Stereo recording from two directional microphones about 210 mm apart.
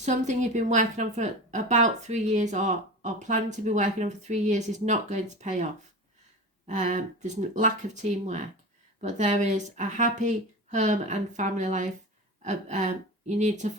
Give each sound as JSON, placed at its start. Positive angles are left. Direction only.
{"t": 0.0, "sound": "a woman's voice", "side_deg": -35}
{"t": 6.7, "sound": "a woman's voice", "side_deg": -35}